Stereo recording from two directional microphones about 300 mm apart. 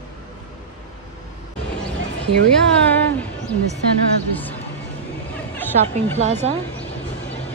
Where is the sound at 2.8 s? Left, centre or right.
Centre.